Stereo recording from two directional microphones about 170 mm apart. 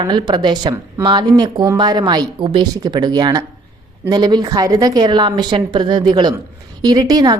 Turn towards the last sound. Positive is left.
turn(degrees=-20)  # may be behind; listen again after turning